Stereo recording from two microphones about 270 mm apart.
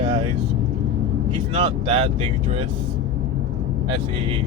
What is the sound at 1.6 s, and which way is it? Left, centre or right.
Speech, centre.